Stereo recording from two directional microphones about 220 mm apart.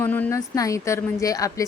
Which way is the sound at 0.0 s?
10° left (ahead or behind).